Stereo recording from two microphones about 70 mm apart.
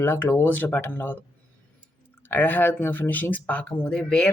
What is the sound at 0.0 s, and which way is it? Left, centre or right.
Speech, left.